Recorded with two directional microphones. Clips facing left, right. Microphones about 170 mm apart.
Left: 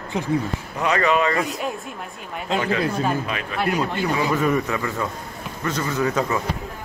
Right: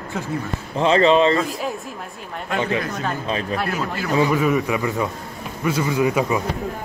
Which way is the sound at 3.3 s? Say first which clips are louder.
Right 5 dB; 30° right (ahead or behind).